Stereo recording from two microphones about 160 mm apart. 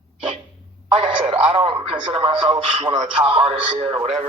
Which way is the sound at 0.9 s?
35° right (ahead or behind).